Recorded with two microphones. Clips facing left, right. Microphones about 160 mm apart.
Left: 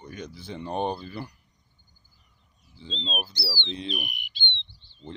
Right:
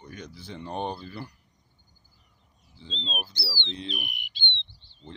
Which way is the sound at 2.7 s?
15° left (ahead or behind).